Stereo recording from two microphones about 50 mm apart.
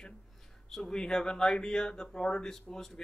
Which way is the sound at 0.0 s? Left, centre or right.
Centre.